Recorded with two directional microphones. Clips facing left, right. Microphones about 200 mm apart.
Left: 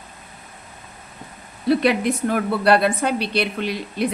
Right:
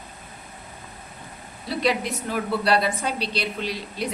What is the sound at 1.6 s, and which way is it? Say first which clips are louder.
A woman's voice: left 7 dB; 60° left (ahead or behind).